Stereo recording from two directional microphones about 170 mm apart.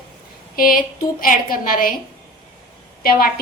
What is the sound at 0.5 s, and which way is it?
A woman's voice, 55° left (ahead or behind).